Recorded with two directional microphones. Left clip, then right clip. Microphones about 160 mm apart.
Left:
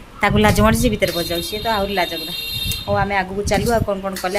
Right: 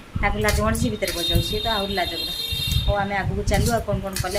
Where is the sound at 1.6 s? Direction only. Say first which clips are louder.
Left 8 dB; 35° left (ahead or behind).